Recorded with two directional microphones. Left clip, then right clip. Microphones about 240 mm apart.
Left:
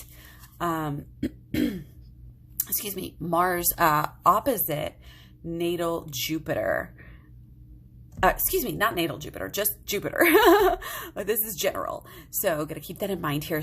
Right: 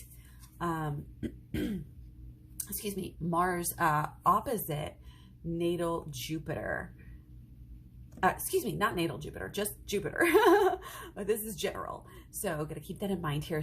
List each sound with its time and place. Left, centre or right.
0.6 s throat clearing: left
2.6 s a woman's voice: left
8.2 s a woman's voice: left